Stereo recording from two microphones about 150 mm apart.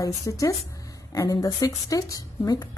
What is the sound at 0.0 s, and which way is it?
Speech, 20° left (ahead or behind).